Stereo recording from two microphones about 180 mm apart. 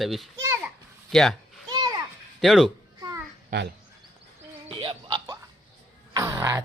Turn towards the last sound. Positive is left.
turn(degrees=-15)  # may be behind; listen again after turning